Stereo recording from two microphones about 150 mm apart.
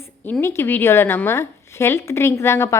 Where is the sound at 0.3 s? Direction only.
15° left (ahead or behind).